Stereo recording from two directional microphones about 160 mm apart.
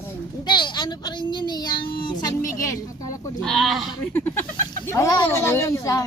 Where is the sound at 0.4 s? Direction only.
30° left (ahead or behind).